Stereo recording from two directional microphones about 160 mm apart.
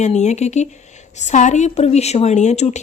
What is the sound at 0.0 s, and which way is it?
A woman's voice, 45° left (ahead or behind).